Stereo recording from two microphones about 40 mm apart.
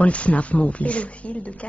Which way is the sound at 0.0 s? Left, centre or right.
Left.